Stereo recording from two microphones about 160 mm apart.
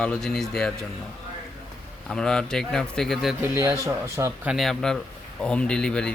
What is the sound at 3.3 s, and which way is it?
Speech, 15° right (ahead or behind).